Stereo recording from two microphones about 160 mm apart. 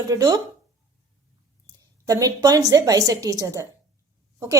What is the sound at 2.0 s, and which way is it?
A woman's voice, 20° right (ahead or behind).